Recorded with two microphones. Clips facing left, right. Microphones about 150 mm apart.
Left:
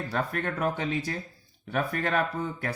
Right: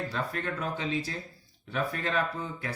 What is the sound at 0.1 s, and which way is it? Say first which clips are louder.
Speech: left 3 dB; 55° left (ahead or behind).